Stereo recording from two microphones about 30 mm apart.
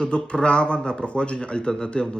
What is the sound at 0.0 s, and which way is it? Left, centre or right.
Speech, left.